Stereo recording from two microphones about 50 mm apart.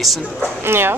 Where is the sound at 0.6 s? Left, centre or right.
Right.